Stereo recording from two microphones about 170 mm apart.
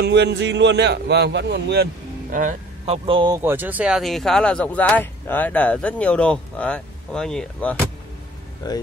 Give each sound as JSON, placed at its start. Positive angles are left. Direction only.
{"t": 0.0, "sound": "a man's voice", "side_deg": -85}
{"t": 2.8, "sound": "speech", "side_deg": -35}
{"t": 3.4, "sound": "speech", "side_deg": -10}
{"t": 8.6, "sound": "speech", "side_deg": 25}